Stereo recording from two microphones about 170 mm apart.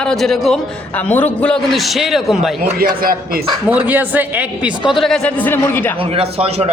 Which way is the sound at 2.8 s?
55° right (ahead or behind).